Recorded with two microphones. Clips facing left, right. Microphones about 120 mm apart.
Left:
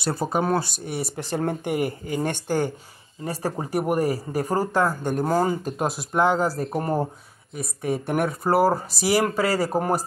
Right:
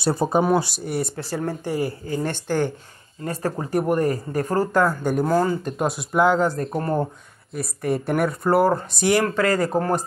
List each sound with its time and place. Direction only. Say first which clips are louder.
0.0 s speech: right 4 dB; 25° right (ahead or behind)
0.4 s speech: right 3 dB; 10° right (ahead or behind)
0.8 s speech: right 4 dB; centre (ahead or behind)
1.1 s speech: left 1 dB; 25° left (ahead or behind)
3.7 s speech: right 2 dB; 10° left (ahead or behind)
4.7 s speech: right 4 dB; centre (ahead or behind)
7.5 s speech: right 2 dB; centre (ahead or behind)